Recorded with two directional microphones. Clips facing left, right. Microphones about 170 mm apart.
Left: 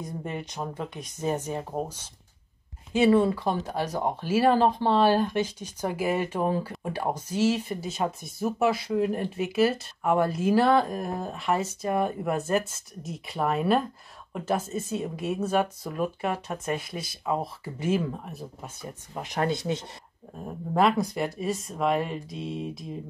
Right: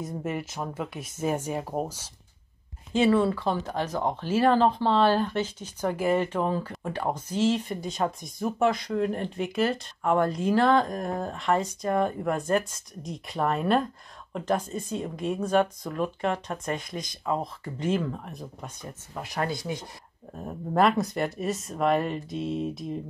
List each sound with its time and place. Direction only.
0.0 s speech: 5° right (ahead or behind)
2.9 s speech: 10° left (ahead or behind)
19.1 s speech: 20° left (ahead or behind)
20.4 s speech: centre (ahead or behind)